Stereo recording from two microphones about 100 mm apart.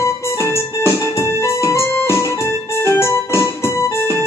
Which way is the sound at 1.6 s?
30° left (ahead or behind).